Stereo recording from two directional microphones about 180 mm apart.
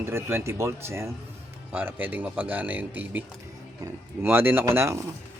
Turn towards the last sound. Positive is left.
turn(degrees=-15)  # may be behind; listen again after turning